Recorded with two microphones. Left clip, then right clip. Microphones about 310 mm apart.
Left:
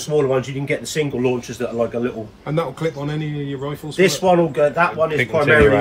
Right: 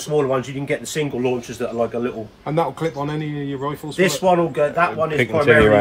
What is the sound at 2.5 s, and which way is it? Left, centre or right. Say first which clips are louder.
A man's voice: right 1 dB; right.